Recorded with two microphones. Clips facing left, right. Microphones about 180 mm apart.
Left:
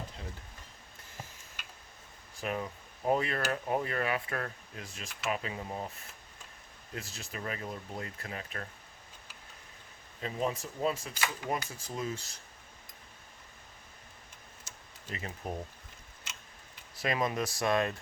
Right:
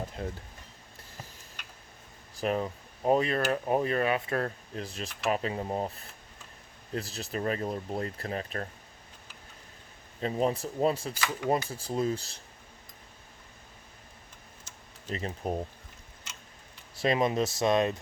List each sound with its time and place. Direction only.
0.2 s speech: 50° right (ahead or behind)
2.3 s speech: 35° right (ahead or behind)
3.0 s speech: 20° right (ahead or behind)
6.9 s speech: 35° right (ahead or behind)
10.2 s speech: 35° right (ahead or behind)
15.1 s speech: 30° right (ahead or behind)
16.9 s speech: 25° right (ahead or behind)